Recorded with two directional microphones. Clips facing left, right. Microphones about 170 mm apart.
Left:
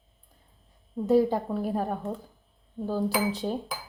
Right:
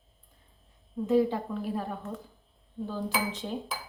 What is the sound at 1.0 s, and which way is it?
A woman's voice, 40° left (ahead or behind).